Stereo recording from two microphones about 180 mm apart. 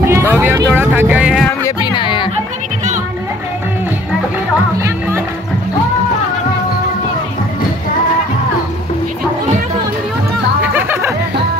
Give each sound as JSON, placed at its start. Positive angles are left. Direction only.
{"t": 0.0, "sound": "vehicle", "side_deg": -15}
{"t": 1.6, "sound": "music", "side_deg": 25}
{"t": 4.7, "sound": "music", "side_deg": -15}
{"t": 10.6, "sound": "music", "side_deg": -10}